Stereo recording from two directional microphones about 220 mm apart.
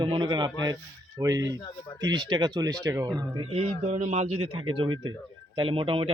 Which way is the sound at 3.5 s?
30° right (ahead or behind).